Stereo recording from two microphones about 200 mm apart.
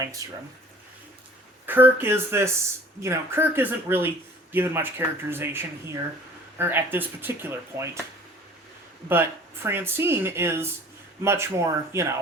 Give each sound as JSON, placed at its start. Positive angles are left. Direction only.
{"t": 0.2, "sound": "speech", "side_deg": -20}
{"t": 1.6, "sound": "speech", "side_deg": -10}
{"t": 9.0, "sound": "speech", "side_deg": -10}